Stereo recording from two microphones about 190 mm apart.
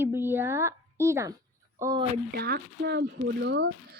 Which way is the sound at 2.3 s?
55° right (ahead or behind).